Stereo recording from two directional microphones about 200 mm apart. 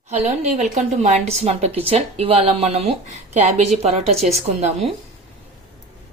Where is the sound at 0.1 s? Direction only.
35° right (ahead or behind).